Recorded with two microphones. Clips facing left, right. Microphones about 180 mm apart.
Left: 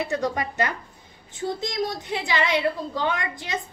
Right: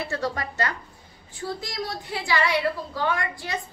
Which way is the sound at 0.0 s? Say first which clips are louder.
Left 3 dB; 20° left (ahead or behind).